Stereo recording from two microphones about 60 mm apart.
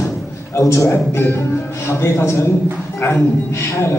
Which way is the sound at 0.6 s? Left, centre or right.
Left.